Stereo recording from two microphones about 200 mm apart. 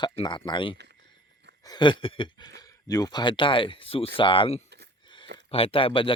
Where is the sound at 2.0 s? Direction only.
25° left (ahead or behind).